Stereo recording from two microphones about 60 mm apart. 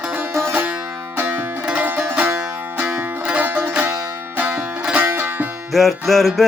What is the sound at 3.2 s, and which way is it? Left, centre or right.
Music, right.